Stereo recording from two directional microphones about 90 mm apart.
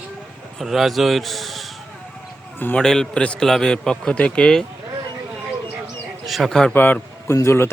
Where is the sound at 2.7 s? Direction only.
5° left (ahead or behind).